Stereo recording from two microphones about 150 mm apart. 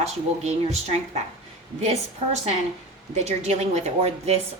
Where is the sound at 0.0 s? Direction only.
50° right (ahead or behind).